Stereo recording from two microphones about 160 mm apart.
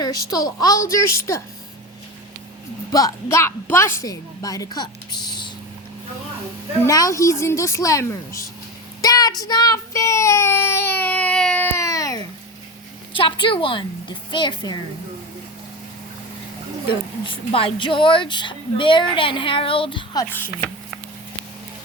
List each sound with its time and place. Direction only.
0.0 s a woman's voice: 25° left (ahead or behind)
2.9 s a woman's voice: 20° left (ahead or behind)
6.8 s a woman's voice: 20° left (ahead or behind)
9.0 s child singing: 25° left (ahead or behind)
13.1 s a woman's voice: 30° left (ahead or behind)
17.2 s a woman's voice: 35° left (ahead or behind)